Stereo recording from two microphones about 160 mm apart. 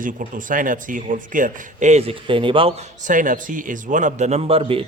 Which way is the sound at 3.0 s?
55° right (ahead or behind).